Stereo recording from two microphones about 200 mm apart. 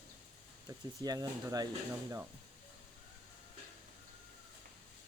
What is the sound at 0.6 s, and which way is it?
Speech, 20° right (ahead or behind).